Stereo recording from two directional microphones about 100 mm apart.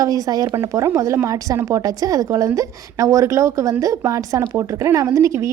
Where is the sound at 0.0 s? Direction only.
40° right (ahead or behind).